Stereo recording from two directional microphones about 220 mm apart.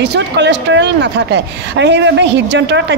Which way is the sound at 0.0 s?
50° right (ahead or behind).